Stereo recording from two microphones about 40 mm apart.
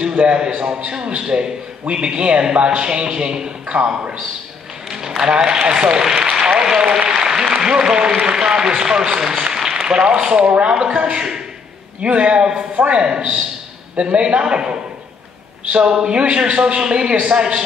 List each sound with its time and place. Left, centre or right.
0.2 s a man's voice: right
3.6 s a man's voice: right
4.9 s a sound: centre
5.3 s a man's voice: centre